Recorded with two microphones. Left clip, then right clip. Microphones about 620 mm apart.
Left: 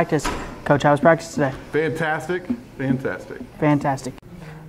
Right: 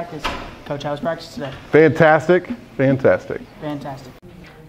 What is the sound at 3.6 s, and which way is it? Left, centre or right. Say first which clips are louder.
Speech: left 9 dB; left.